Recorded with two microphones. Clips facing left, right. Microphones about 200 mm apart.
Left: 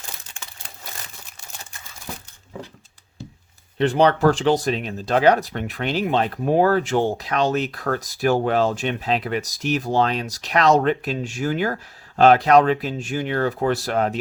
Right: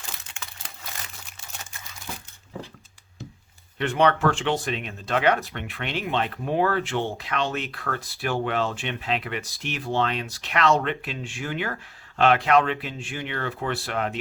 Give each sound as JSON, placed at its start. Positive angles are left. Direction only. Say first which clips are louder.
{"t": 3.8, "sound": "speech", "louder": "left 5 dB", "side_deg": 35}